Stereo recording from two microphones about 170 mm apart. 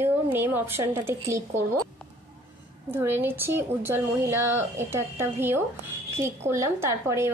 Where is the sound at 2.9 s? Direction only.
15° right (ahead or behind).